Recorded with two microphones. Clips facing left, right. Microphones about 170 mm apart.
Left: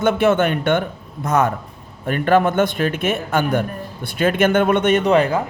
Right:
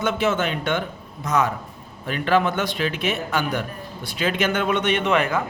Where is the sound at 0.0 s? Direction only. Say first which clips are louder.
Left 6 dB; 55° left (ahead or behind); by 5.4 s 35° left (ahead or behind).